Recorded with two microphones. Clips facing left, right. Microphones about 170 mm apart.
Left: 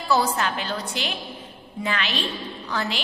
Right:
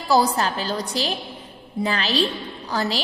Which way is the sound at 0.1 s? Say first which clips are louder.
Right 3 dB; 35° right (ahead or behind).